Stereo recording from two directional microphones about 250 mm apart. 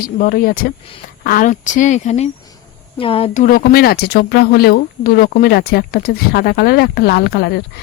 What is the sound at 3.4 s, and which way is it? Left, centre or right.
A woman's voice, left.